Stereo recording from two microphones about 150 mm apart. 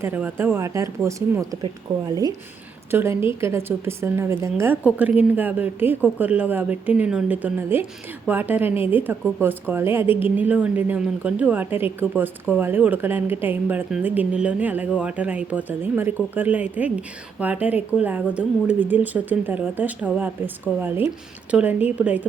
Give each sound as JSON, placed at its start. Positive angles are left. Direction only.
{"t": 0.0, "sound": "a woman's voice", "side_deg": -15}
{"t": 2.9, "sound": "a woman's voice", "side_deg": -15}